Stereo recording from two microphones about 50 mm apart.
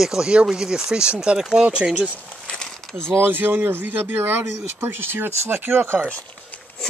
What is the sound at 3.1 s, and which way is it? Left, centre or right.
Speech, right.